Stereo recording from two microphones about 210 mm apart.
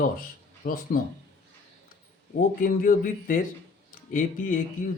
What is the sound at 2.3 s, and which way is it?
A man's voice, 40° left (ahead or behind).